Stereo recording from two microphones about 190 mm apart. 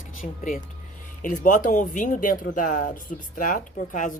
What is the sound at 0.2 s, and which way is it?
Speech, 45° left (ahead or behind).